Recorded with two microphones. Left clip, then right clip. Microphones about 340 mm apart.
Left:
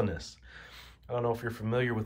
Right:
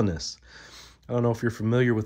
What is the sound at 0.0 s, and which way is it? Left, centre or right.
Speech, centre.